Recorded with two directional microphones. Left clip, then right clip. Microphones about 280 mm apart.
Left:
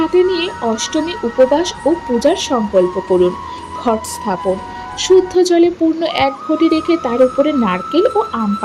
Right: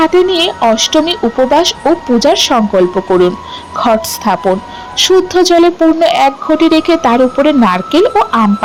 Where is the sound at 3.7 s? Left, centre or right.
Centre.